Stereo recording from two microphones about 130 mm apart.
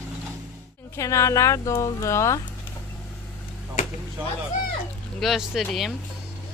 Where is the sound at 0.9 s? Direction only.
20° left (ahead or behind).